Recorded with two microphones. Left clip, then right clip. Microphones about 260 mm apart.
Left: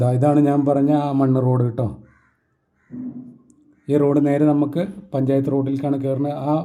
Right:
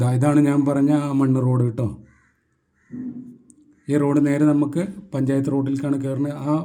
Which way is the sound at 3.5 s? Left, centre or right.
Centre.